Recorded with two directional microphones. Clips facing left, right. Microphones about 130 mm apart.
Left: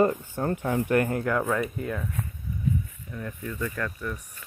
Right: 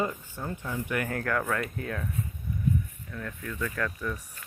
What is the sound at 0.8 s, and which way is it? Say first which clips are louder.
Speech: left 8 dB; 35° left (ahead or behind).